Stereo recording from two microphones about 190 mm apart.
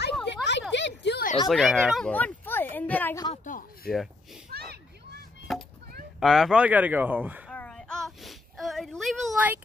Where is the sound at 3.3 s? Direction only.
45° left (ahead or behind).